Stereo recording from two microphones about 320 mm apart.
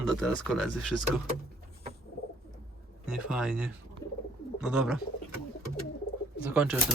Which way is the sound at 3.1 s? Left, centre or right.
Centre.